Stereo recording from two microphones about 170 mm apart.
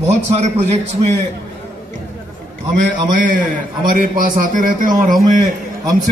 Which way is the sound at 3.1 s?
50° right (ahead or behind).